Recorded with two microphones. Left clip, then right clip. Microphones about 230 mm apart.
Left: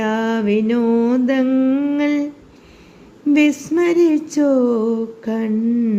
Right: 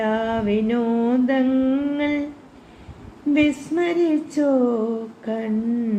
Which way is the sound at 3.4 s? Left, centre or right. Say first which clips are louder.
Left 4 dB; left.